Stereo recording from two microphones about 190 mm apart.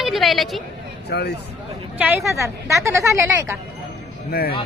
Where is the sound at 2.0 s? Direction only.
10° right (ahead or behind).